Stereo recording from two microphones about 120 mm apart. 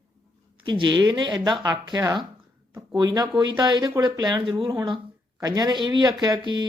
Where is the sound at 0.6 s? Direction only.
40° right (ahead or behind).